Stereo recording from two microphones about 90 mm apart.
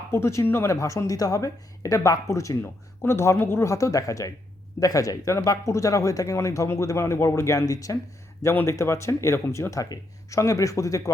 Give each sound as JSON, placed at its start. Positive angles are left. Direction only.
{"t": 0.1, "sound": "speech", "side_deg": 30}